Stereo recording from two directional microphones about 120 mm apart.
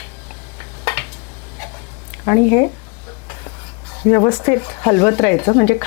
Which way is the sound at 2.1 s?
20° left (ahead or behind).